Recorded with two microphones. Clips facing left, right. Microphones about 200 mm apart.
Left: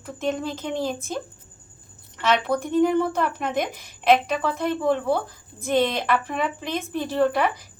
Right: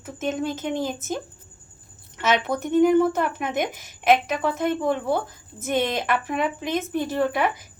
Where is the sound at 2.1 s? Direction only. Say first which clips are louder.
Left 1 dB; centre (ahead or behind).